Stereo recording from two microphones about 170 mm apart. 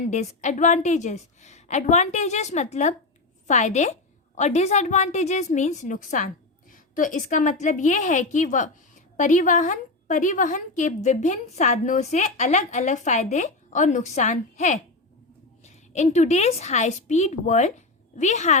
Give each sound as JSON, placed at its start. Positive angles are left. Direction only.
{"t": 0.1, "sound": "a woman's voice", "side_deg": 45}